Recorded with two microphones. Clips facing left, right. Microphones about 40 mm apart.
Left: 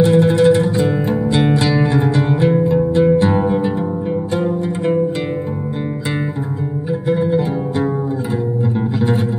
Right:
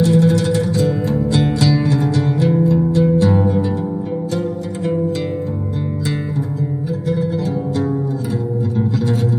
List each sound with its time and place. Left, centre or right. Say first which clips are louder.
0.0 s music: left 3 dB; left
7.1 s music: left 4 dB; left